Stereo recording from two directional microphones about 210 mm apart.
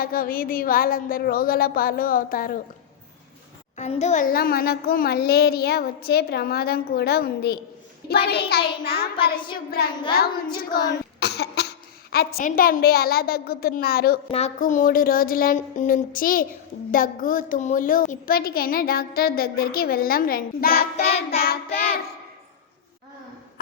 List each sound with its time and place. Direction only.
0.0 s a woman's voice: 45° left (ahead or behind)
3.8 s a woman's voice: 30° left (ahead or behind); by 9.0 s 50° left (ahead or behind)
9.1 s child singing: 25° left (ahead or behind)
11.2 s cough: 50° left (ahead or behind)
12.1 s a woman's voice: 45° left (ahead or behind)
14.3 s a woman's voice: 30° left (ahead or behind)
20.9 s child singing: 30° left (ahead or behind)
21.2 s child singing: 45° left (ahead or behind)